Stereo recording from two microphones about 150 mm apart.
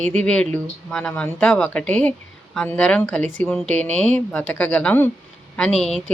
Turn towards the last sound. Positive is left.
turn(degrees=0)  # may be behind; listen again after turning